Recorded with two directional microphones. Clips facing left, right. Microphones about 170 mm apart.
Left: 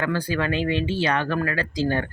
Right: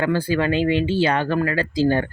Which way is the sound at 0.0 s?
30° right (ahead or behind).